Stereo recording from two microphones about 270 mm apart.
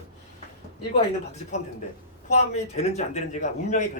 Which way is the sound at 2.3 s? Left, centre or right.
Left.